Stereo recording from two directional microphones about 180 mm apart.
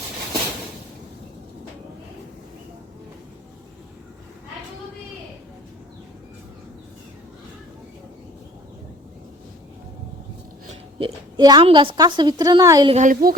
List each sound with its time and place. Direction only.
10.9 s a woman's voice: 25° right (ahead or behind)
12.9 s speech: 45° right (ahead or behind)